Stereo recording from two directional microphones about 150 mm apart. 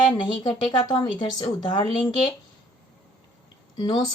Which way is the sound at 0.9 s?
30° left (ahead or behind).